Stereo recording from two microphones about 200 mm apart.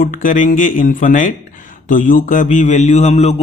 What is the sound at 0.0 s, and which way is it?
Mantra, 40° left (ahead or behind).